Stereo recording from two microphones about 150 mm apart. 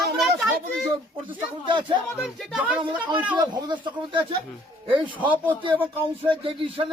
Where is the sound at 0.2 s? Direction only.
Centre (ahead or behind).